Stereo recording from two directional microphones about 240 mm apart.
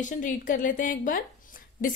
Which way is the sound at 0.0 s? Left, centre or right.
Left.